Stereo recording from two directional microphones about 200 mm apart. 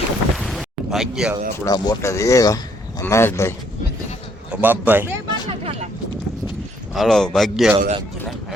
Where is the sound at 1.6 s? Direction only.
20° left (ahead or behind).